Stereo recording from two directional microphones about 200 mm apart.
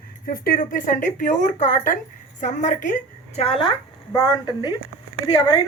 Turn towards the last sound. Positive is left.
turn(degrees=20)  # may be behind; listen again after turning